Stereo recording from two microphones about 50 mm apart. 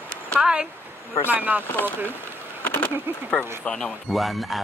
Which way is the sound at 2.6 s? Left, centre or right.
Left.